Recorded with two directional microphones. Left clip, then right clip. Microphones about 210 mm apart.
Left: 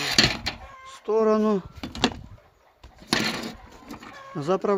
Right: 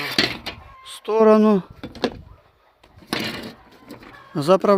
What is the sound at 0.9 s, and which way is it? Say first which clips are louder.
Speech: right 7 dB; 55° right (ahead or behind).